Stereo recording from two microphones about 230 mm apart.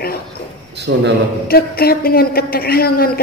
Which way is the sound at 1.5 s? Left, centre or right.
Left.